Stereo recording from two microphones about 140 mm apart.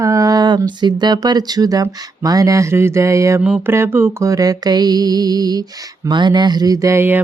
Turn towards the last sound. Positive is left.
turn(degrees=-15)  # may be behind; listen again after turning